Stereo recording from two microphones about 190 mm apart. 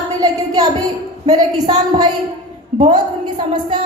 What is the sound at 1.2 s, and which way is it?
Speech, 20° right (ahead or behind).